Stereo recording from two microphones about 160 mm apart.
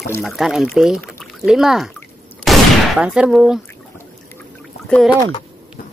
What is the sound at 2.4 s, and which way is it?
Fusillade, 5° right (ahead or behind).